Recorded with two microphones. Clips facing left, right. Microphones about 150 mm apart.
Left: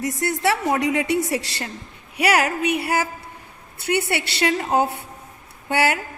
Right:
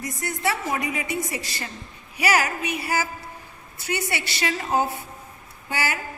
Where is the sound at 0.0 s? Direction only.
80° left.